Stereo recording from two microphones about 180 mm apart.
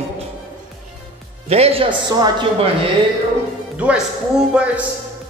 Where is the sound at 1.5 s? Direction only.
35° right (ahead or behind).